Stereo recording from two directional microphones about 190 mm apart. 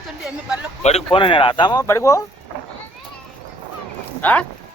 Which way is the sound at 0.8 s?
30° left (ahead or behind).